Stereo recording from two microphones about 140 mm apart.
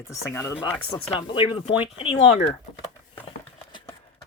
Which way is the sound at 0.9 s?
40° left (ahead or behind).